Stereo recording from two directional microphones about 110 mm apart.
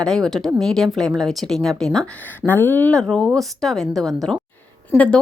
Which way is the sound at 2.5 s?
20° left (ahead or behind).